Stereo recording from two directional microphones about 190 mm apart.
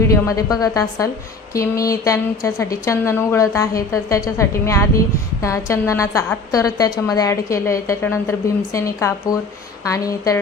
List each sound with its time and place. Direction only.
0.1 s a woman's voice: 15° left (ahead or behind)